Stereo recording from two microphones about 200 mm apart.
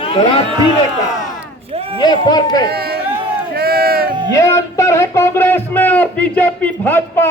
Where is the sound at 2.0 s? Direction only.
20° left (ahead or behind).